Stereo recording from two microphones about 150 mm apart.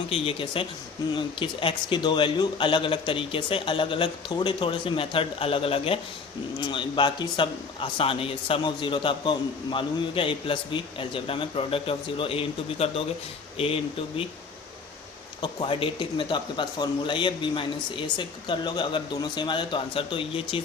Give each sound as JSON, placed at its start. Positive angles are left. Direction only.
{"t": 0.1, "sound": "a man's voice", "side_deg": 35}
{"t": 15.4, "sound": "a man's voice", "side_deg": 35}